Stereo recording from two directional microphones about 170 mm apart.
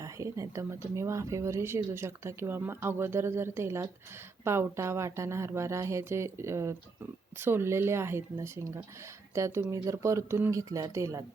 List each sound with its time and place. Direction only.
0.0 s speech: 20° right (ahead or behind)